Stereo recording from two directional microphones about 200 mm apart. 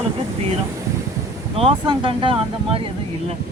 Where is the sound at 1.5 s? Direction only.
25° right (ahead or behind).